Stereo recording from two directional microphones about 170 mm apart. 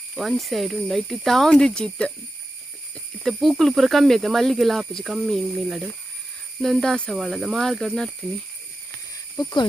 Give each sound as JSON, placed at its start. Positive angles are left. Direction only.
{"t": 0.2, "sound": "speech", "side_deg": 0}
{"t": 3.2, "sound": "speech", "side_deg": 0}
{"t": 9.3, "sound": "speech", "side_deg": 20}